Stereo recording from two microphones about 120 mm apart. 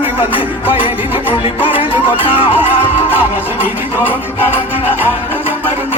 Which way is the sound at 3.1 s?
15° right (ahead or behind).